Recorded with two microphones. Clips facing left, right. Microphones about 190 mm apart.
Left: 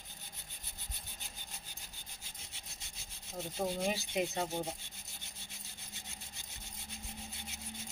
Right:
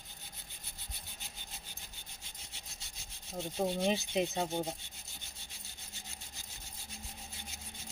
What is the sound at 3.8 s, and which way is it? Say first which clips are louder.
Speech: right 4 dB; 25° right (ahead or behind).